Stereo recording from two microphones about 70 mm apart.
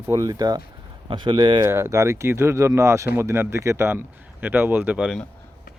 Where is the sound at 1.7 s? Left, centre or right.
Right.